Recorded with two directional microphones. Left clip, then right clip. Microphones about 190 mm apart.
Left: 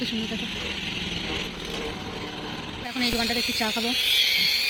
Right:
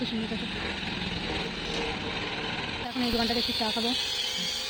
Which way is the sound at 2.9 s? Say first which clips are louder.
Left 4 dB; centre (ahead or behind).